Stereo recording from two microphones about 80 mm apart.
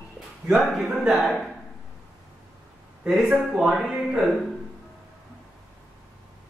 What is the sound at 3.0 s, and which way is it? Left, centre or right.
Speech, centre.